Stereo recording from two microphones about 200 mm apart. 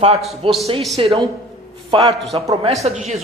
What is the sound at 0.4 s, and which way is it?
A woman's voice, 25° right (ahead or behind).